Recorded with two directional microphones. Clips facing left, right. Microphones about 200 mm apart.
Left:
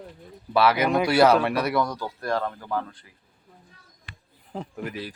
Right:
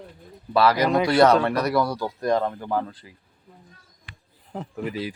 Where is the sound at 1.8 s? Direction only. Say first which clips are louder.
Right 3 dB; 10° right (ahead or behind).